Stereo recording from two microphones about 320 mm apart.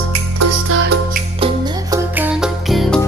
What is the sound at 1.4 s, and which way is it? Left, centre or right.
Music, centre.